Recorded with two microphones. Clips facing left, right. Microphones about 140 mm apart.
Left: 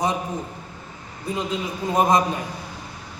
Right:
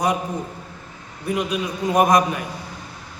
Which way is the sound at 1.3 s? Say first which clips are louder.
Right 3 dB; 15° right (ahead or behind).